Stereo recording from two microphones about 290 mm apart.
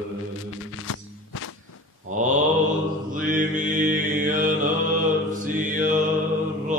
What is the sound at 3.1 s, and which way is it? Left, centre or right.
Mantra, right.